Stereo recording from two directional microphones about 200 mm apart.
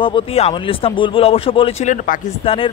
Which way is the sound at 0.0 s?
30° left (ahead or behind).